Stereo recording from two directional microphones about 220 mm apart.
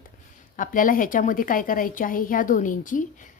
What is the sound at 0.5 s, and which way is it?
A woman's voice, 40° left (ahead or behind).